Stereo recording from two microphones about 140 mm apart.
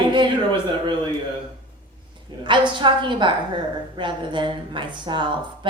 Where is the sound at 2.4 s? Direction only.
35° right (ahead or behind).